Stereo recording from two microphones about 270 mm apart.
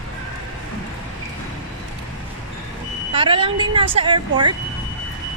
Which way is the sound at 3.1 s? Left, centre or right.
Centre.